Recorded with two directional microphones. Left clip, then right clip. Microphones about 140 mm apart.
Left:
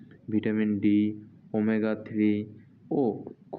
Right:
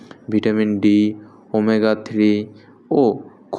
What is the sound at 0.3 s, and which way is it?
Speech, 35° right (ahead or behind).